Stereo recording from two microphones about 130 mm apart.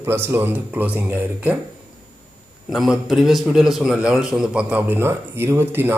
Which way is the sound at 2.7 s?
Centre (ahead or behind).